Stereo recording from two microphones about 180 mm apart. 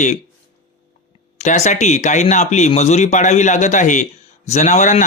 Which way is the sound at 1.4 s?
40° left (ahead or behind).